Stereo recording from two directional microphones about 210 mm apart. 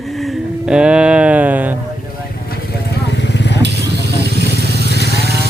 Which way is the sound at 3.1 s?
55° left (ahead or behind).